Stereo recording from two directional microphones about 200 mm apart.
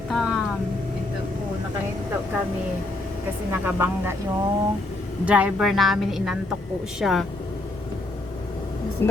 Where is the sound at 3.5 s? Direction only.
10° right (ahead or behind).